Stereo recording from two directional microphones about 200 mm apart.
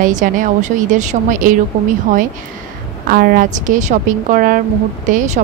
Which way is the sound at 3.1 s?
45° right (ahead or behind).